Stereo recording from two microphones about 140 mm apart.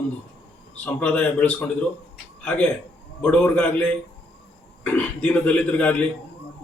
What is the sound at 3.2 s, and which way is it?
Speech, 10° left (ahead or behind).